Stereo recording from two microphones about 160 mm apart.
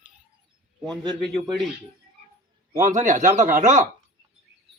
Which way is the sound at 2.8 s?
55° right (ahead or behind).